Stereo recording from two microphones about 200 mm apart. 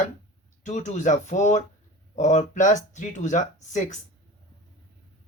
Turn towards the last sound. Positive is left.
turn(degrees=35)  # may be behind; listen again after turning